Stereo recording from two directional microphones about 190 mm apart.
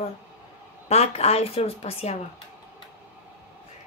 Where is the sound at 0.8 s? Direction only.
35° left (ahead or behind).